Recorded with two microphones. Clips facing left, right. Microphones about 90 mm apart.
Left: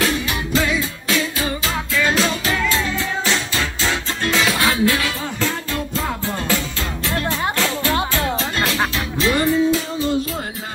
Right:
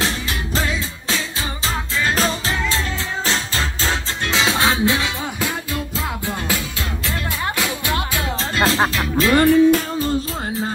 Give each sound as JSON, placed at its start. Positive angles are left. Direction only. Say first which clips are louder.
{"t": 0.0, "sound": "music", "louder": "left 3 dB", "side_deg": -35}
{"t": 7.5, "sound": "music", "louder": "left 3 dB", "side_deg": -15}
{"t": 8.4, "sound": "music", "louder": "right 3 dB", "side_deg": -30}
{"t": 9.3, "sound": "music", "louder": "right 5 dB", "side_deg": -55}